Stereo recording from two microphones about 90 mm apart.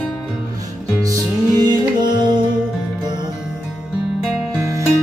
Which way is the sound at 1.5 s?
55° right (ahead or behind).